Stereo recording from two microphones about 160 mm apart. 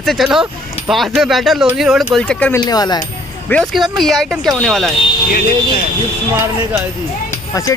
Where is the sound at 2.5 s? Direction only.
25° left (ahead or behind).